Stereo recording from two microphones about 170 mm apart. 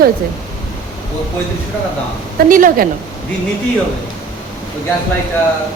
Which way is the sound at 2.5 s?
50° right (ahead or behind).